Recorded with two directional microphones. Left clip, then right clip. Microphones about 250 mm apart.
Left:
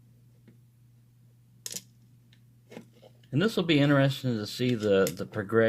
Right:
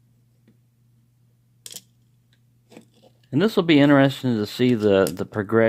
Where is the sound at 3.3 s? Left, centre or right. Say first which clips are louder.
Right 8 dB; right.